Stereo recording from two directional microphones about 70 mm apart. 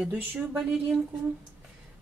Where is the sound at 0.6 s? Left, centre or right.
Centre.